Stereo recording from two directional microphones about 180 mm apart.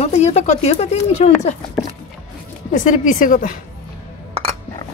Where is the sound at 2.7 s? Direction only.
45° left (ahead or behind).